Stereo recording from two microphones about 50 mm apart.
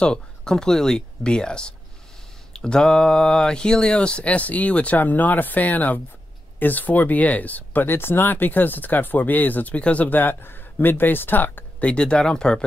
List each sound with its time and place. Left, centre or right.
0.0 s speech: centre
10.0 s speech: left
11.8 s speech: left